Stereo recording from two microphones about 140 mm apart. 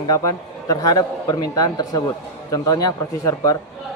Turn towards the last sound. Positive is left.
turn(degrees=25)  # may be behind; listen again after turning